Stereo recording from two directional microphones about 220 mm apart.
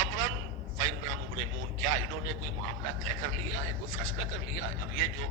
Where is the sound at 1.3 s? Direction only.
65° right (ahead or behind).